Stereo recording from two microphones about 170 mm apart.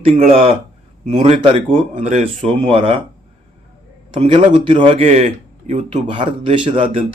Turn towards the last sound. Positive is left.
turn(degrees=-30)  # may be behind; listen again after turning